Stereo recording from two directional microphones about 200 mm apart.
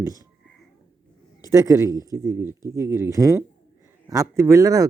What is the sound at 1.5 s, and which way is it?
Speech, 15° right (ahead or behind).